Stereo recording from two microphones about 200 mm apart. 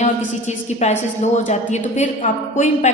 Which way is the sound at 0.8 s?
35° left (ahead or behind).